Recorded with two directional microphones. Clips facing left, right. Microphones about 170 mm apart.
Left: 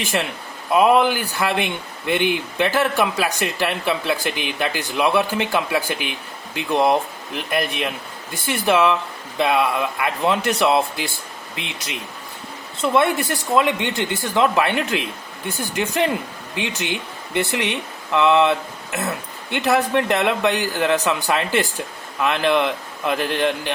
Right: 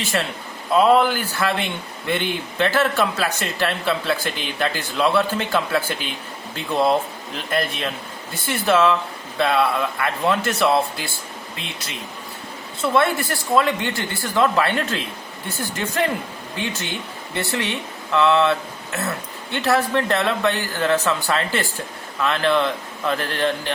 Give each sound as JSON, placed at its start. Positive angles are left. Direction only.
{"t": 0.0, "sound": "speech", "side_deg": 15}